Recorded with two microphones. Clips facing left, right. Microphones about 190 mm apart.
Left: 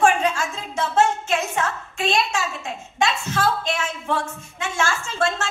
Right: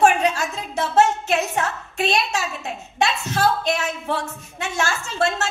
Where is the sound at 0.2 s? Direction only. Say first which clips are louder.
Right 1 dB; 40° right (ahead or behind).